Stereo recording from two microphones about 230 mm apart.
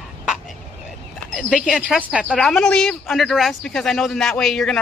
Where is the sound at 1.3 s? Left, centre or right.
Centre.